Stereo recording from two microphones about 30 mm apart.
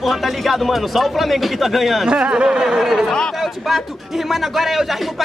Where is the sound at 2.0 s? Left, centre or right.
Right.